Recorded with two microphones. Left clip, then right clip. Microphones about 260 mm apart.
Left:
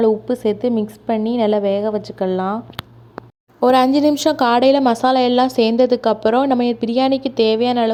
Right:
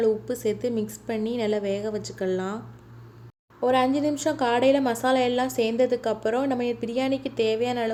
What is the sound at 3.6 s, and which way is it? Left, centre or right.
A woman's voice, left.